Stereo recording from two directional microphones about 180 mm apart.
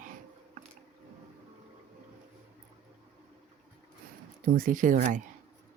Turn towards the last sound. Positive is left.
turn(degrees=-45)  # may be behind; listen again after turning